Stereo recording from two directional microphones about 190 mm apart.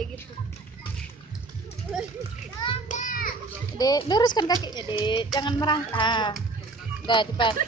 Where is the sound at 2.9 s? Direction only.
45° left (ahead or behind).